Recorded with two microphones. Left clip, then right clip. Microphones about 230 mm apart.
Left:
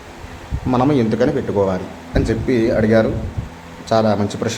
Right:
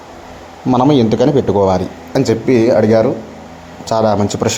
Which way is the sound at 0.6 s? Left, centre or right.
Centre.